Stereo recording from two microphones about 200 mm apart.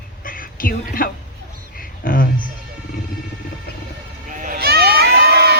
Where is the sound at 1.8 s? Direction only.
45° left (ahead or behind).